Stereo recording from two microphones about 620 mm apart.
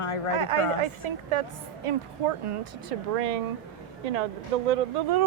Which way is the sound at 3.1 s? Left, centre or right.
Right.